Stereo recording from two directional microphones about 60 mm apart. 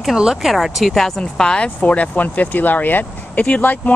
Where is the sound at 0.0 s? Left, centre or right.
Centre.